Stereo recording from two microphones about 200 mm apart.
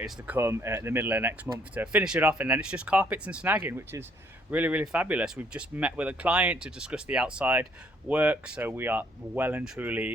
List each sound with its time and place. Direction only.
0.0 s speech: 10° right (ahead or behind)